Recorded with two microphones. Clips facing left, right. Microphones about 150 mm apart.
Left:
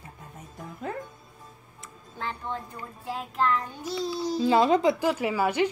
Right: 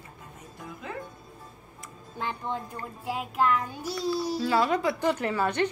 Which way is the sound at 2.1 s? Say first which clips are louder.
Right 1 dB; 15° right (ahead or behind).